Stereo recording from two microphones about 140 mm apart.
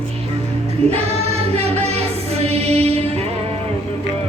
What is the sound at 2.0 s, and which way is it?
Music, 45° right (ahead or behind).